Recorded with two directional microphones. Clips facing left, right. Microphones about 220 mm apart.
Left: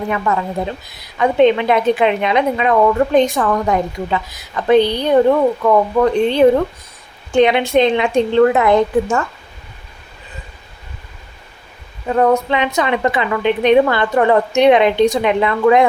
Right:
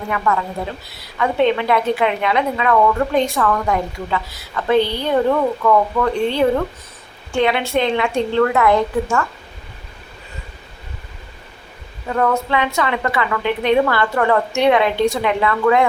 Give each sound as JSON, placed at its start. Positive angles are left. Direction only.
{"t": 1.2, "sound": "a woman's voice", "side_deg": 20}
{"t": 12.0, "sound": "a woman's voice", "side_deg": 20}